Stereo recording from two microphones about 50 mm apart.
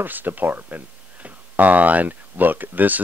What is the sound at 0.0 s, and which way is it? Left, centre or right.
Speech, right.